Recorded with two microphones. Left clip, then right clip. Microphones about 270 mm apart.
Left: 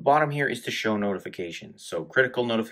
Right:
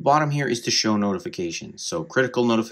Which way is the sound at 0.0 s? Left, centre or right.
Right.